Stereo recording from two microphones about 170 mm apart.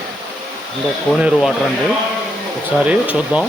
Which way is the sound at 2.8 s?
10° right (ahead or behind).